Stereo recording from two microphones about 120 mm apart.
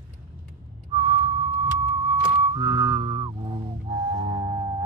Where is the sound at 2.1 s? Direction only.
40° right (ahead or behind).